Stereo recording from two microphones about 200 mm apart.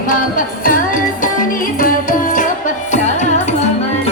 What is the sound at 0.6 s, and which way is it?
Music, 45° left (ahead or behind).